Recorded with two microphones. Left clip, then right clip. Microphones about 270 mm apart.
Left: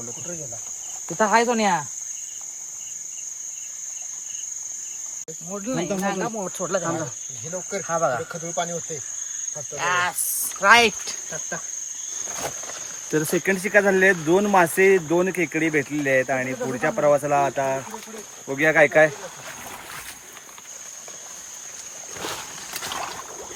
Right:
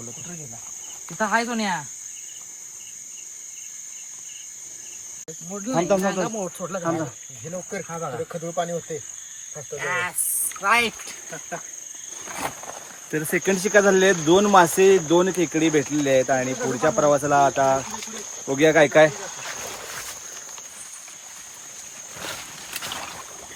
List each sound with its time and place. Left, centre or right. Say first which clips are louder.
1.2 s speech: left 4 dB; left
5.5 s speech: right 6 dB; centre
8.5 s speech: right 1 dB; centre
9.7 s speech: left 3 dB; centre
10.6 s speech: left 5 dB; left
13.1 s speech: left 2 dB; centre
13.4 s speech: right 2 dB; centre